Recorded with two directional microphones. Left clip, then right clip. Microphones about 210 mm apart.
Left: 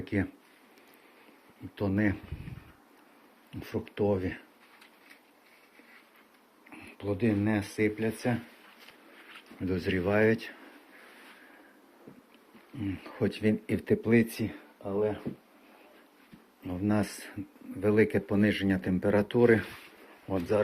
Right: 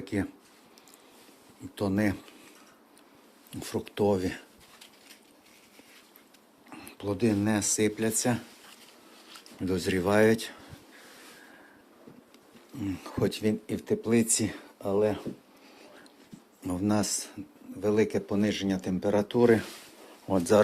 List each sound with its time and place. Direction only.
0.0 s speech: centre (ahead or behind)
1.7 s speech: 15° right (ahead or behind)
3.5 s speech: 20° right (ahead or behind)
6.7 s speech: 20° right (ahead or behind)
9.6 s speech: 20° right (ahead or behind)
12.7 s speech: 15° right (ahead or behind)
13.7 s speech: 15° left (ahead or behind)
14.5 s speech: 45° right (ahead or behind)
16.6 s speech: 25° right (ahead or behind)
16.9 s speech: 5° right (ahead or behind)
20.2 s speech: 25° right (ahead or behind)